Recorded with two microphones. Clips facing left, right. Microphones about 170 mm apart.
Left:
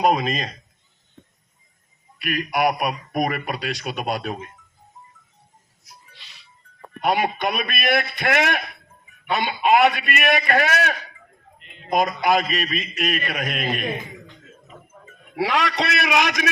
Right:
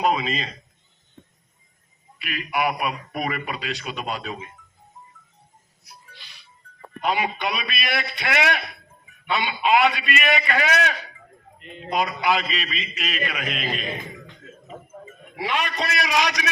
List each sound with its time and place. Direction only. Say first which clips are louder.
0.0 s a man's voice: left 3 dB; 45° left (ahead or behind)
2.2 s a man's voice: left 4 dB; 45° left (ahead or behind)
7.0 s a man's voice: left 3 dB; 50° left (ahead or behind)
15.4 s a man's voice: left 4 dB; 90° left; by 16.5 s 55° left (ahead or behind)